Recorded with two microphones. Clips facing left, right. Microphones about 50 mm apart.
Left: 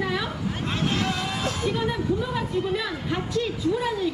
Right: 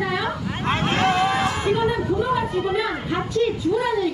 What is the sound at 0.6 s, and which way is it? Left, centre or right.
Speech, right.